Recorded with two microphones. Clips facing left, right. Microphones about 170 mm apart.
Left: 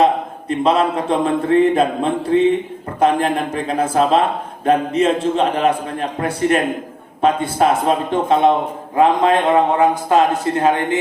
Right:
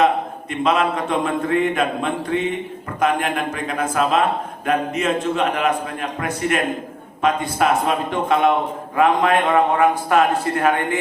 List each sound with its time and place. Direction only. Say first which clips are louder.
0.0 s a man's voice: left 2 dB; 30° left (ahead or behind)